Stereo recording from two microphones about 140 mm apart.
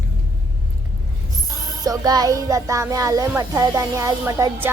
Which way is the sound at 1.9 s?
30° right (ahead or behind).